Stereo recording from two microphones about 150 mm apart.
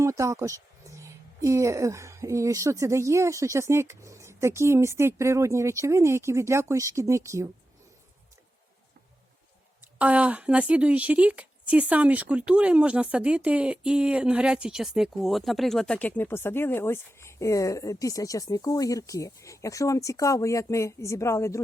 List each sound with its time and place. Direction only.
0.0 s speech: 20° right (ahead or behind)
9.8 s speech: 10° right (ahead or behind); by 21.6 s 20° left (ahead or behind)